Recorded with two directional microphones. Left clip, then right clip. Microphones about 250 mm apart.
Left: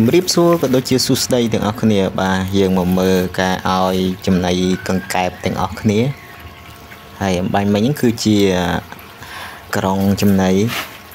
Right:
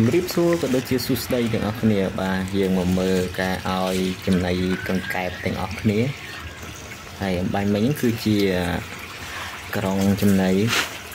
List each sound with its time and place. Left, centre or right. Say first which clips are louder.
0.1 s speech: left 7 dB; centre
7.2 s speech: left 7 dB; centre